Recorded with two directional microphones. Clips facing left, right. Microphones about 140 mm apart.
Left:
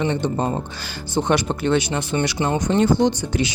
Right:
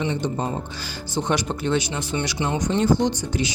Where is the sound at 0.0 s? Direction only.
60° left (ahead or behind).